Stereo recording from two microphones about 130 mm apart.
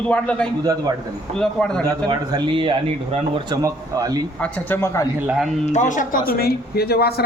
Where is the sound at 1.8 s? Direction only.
30° right (ahead or behind).